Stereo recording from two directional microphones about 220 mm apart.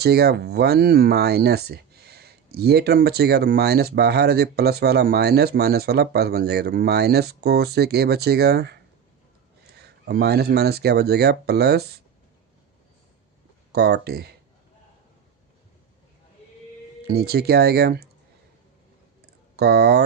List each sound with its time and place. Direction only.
0.0 s speech: 45° right (ahead or behind)
10.1 s speech: 45° right (ahead or behind)
13.7 s speech: 45° right (ahead or behind)
17.1 s speech: 45° right (ahead or behind)
19.2 s a sound: 45° right (ahead or behind)